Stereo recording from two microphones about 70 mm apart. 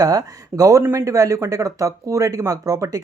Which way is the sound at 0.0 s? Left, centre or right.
Right.